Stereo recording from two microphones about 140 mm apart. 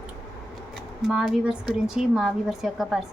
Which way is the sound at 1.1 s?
5° right (ahead or behind).